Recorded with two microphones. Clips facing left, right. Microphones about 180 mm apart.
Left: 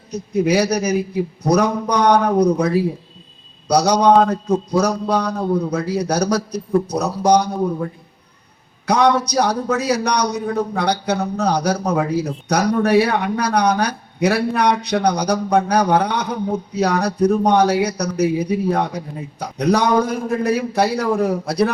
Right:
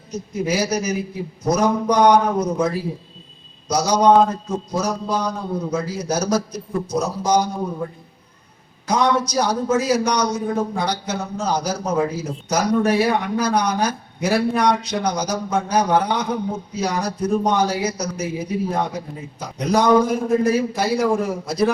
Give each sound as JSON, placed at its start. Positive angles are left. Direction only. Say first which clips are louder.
{"t": 0.1, "sound": "a man's voice", "louder": "left 6 dB", "side_deg": 65}
{"t": 8.9, "sound": "speech", "louder": "left 3 dB", "side_deg": 65}